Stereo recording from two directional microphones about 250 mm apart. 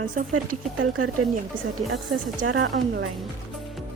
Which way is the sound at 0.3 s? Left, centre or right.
Right.